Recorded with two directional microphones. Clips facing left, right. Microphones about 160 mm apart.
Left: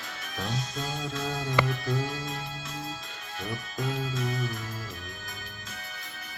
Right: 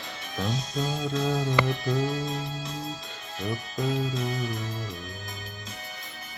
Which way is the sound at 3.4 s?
20° right (ahead or behind).